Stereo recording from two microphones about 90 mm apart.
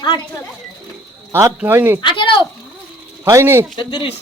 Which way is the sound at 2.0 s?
70° left (ahead or behind).